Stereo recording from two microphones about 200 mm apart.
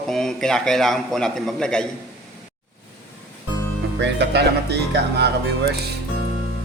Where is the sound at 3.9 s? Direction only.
60° right (ahead or behind).